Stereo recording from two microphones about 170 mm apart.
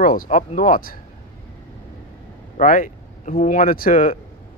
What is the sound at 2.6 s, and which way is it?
Speech, 50° left (ahead or behind).